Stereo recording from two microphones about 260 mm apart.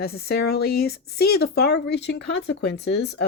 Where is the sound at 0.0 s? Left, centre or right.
Left.